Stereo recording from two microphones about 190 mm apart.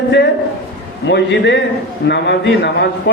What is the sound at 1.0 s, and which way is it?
A man's voice, 65° left (ahead or behind).